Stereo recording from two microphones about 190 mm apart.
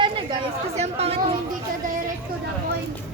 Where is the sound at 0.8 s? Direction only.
30° right (ahead or behind).